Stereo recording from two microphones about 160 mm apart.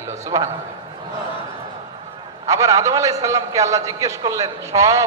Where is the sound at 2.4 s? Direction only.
20° right (ahead or behind).